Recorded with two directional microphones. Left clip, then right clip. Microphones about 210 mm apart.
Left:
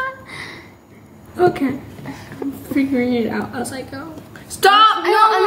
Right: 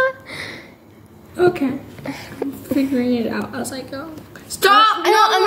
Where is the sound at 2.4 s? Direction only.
35° right (ahead or behind).